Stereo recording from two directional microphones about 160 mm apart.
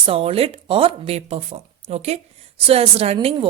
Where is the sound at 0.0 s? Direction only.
35° right (ahead or behind).